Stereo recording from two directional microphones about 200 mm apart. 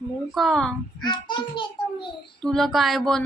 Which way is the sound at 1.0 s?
25° left (ahead or behind).